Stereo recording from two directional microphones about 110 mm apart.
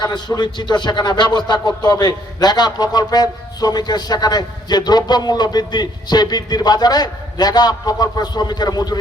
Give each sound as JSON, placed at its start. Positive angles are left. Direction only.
{"t": 0.0, "sound": "a man's voice", "side_deg": 40}